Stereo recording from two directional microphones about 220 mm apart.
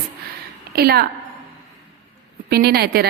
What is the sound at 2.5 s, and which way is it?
Speech, 45° right (ahead or behind).